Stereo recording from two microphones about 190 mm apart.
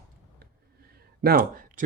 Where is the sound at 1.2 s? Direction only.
50° right (ahead or behind).